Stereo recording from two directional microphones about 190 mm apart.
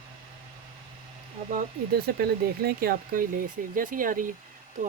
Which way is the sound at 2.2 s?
55° right (ahead or behind).